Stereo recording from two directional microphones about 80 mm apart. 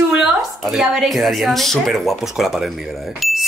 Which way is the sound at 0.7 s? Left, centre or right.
Centre.